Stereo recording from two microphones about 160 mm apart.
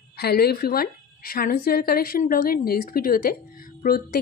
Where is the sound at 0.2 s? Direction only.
80° left.